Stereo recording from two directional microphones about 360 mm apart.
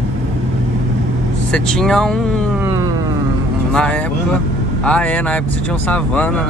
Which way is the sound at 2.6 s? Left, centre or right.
Centre.